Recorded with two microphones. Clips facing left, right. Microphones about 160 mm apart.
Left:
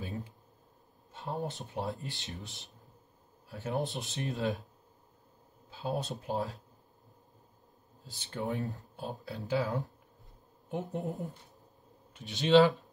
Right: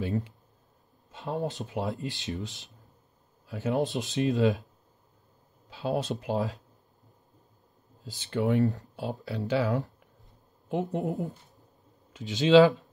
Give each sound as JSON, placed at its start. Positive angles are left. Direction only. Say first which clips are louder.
{"t": 0.0, "sound": "a sound", "louder": "right 9 dB", "side_deg": -75}
{"t": 1.1, "sound": "speech", "louder": "right 5 dB", "side_deg": -85}
{"t": 5.7, "sound": "speech", "louder": "right 6 dB", "side_deg": -80}
{"t": 8.2, "sound": "speech", "louder": "right 10 dB", "side_deg": -90}